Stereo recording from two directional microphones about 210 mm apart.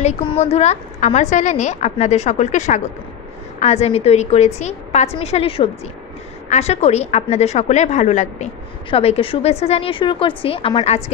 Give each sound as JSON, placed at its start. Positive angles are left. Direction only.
{"t": 0.0, "sound": "a woman's voice", "side_deg": 30}